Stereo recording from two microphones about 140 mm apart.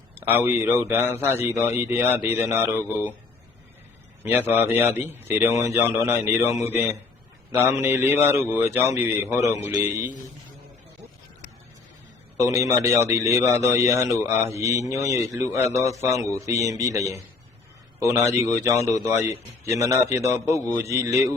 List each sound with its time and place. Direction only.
0.2 s a man's voice: 15° right (ahead or behind)
4.2 s a man's voice: 15° right (ahead or behind)
12.5 s a man's voice: 20° right (ahead or behind)
18.0 s speech: 20° right (ahead or behind)